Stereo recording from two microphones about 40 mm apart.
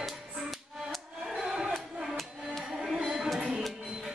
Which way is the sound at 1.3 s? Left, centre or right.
Centre.